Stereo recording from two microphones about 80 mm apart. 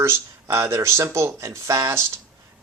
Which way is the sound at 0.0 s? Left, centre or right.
Right.